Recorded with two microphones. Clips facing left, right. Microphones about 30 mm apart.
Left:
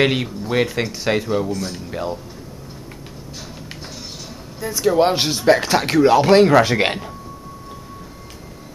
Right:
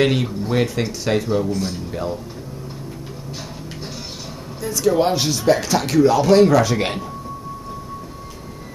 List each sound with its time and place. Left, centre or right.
0.0 s a man's voice: centre
1.5 s speech: centre
1.9 s a man's voice: centre
4.6 s a man's voice: centre; by 7.1 s left